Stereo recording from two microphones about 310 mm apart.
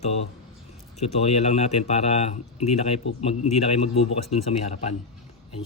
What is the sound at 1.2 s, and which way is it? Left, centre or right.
Speech, left.